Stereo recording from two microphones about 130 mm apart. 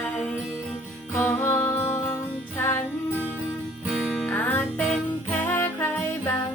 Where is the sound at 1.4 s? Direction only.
15° left (ahead or behind).